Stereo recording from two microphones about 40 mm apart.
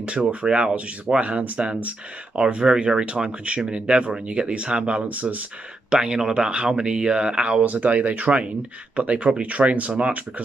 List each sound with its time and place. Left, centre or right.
0.0 s speech: right
5.0 s speech: right
5.9 s speech: centre